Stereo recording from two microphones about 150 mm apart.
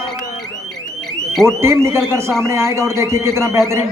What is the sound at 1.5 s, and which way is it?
Speech, 15° right (ahead or behind).